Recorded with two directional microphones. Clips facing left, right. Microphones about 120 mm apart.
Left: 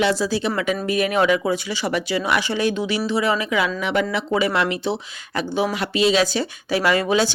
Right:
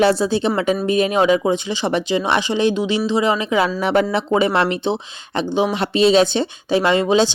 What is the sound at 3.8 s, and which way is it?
Speech, 35° right (ahead or behind).